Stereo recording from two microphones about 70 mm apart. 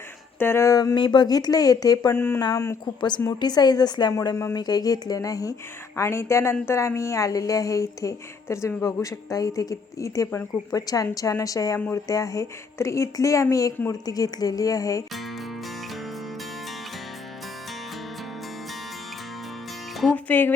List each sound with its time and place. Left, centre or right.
0.3 s speech: left
0.6 s a woman's voice: left
0.9 s speech: left
2.1 s speech: left
3.2 s a woman's voice: left
4.1 s speech: left
6.0 s a woman's voice: left
14.0 s speech: left
20.1 s speech: left